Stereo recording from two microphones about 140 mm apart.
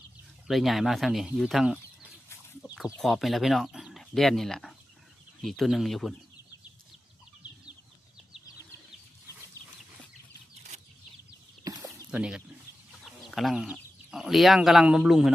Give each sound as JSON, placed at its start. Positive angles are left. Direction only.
{"t": 0.4, "sound": "speech", "side_deg": 0}
{"t": 11.6, "sound": "a sound", "side_deg": -25}
{"t": 12.1, "sound": "speech", "side_deg": -5}
{"t": 13.1, "sound": "chicken", "side_deg": 0}
{"t": 14.1, "sound": "speech", "side_deg": 0}